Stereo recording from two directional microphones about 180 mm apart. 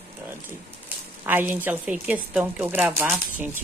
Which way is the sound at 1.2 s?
10° right (ahead or behind).